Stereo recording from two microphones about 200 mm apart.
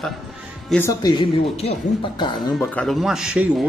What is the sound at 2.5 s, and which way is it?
Speech, 5° left (ahead or behind).